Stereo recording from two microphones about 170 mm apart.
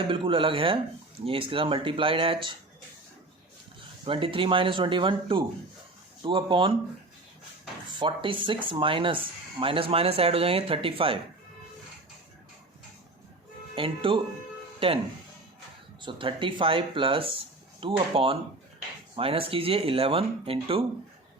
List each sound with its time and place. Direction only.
0.1 s speech: 30° right (ahead or behind)
4.0 s speech: 30° right (ahead or behind)
7.9 s speech: 30° right (ahead or behind)
13.7 s speech: 30° right (ahead or behind)